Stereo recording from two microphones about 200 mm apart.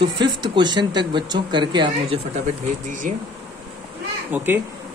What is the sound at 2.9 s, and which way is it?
Speech, 40° right (ahead or behind).